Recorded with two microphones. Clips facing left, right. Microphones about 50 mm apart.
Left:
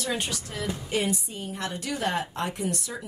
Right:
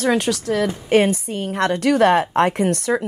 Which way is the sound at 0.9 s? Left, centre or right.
Right.